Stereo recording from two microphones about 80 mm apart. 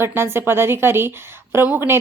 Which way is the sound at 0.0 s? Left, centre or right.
Right.